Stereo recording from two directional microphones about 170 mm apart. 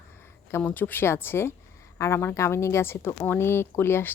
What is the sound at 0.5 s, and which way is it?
Speech, 10° left (ahead or behind).